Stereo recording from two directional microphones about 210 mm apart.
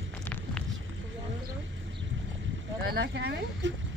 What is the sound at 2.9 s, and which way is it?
Speech, 50° right (ahead or behind).